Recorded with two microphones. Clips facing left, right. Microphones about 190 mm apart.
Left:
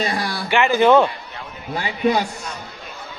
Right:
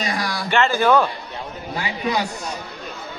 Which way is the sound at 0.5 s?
15° left (ahead or behind).